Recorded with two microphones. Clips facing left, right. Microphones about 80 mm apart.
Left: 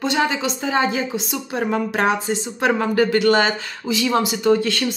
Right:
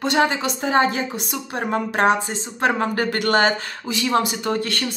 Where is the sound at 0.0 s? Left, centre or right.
Right.